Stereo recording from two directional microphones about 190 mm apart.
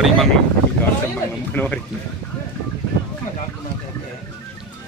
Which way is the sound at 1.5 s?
10° left (ahead or behind).